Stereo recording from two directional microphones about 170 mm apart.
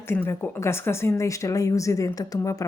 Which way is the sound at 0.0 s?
15° left (ahead or behind).